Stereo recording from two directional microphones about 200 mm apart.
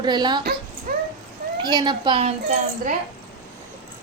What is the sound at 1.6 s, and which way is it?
A woman's voice, 20° right (ahead or behind).